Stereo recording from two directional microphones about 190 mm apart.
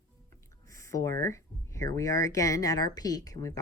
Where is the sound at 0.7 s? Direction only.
15° left (ahead or behind).